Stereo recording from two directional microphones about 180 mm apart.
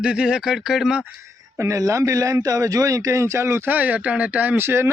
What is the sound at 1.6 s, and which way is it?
A man's voice, 15° right (ahead or behind).